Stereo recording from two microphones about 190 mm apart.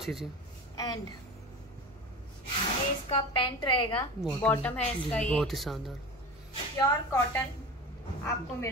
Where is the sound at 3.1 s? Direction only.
25° left (ahead or behind).